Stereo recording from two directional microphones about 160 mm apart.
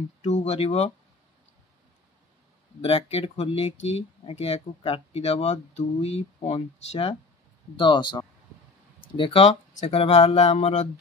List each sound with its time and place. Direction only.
0.2 s speech: 45° left (ahead or behind)
2.8 s speech: 40° left (ahead or behind)
7.7 s speech: 30° left (ahead or behind); by 10.9 s 45° left (ahead or behind)